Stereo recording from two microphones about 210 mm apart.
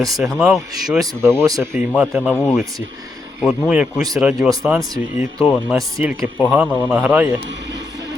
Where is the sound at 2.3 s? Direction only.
10° left (ahead or behind).